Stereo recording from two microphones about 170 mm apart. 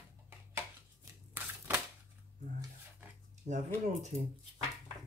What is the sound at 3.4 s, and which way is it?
Speech, 45° right (ahead or behind).